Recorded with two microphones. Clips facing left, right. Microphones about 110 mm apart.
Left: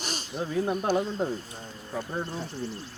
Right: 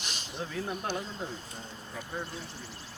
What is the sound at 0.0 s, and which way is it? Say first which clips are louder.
Snake: left 6 dB; 40° left (ahead or behind).